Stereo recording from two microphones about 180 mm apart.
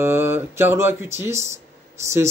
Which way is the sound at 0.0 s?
15° right (ahead or behind).